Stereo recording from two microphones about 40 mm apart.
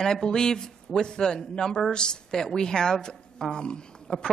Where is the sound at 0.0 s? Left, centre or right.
Centre.